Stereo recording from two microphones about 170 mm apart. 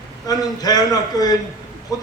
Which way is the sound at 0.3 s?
20° left (ahead or behind).